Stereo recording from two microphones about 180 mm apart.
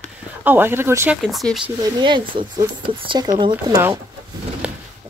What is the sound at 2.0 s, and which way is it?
Speech, 25° right (ahead or behind).